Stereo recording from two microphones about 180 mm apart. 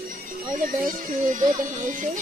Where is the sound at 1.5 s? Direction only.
45° right (ahead or behind).